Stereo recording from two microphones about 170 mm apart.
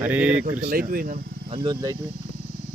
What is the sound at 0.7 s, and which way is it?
Speech, 60° right (ahead or behind).